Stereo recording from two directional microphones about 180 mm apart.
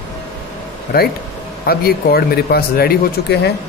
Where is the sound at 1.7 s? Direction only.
60° left (ahead or behind).